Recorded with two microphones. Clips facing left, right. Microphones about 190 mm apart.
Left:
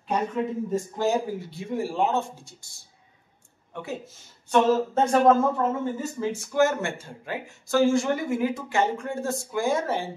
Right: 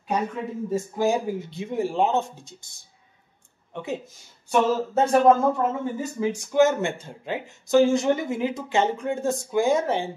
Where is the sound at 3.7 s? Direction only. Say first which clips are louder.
Right 3 dB; 20° right (ahead or behind).